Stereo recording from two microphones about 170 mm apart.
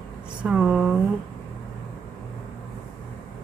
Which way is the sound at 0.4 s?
5° right (ahead or behind).